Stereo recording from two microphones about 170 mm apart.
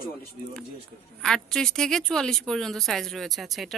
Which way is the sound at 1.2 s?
5° left (ahead or behind).